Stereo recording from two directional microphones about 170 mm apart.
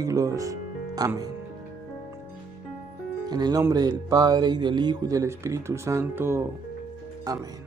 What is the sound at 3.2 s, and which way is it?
Speech, 25° right (ahead or behind).